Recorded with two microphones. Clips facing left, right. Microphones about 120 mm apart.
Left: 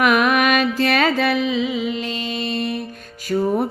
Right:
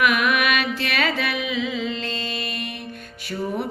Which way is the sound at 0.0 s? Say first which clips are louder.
Left 4 dB; 40° left (ahead or behind).